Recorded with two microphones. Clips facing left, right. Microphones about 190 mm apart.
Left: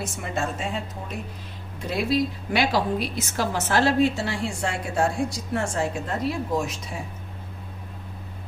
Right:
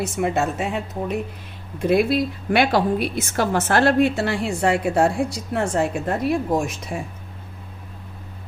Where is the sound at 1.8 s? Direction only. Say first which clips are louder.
Right 6 dB; 55° right (ahead or behind).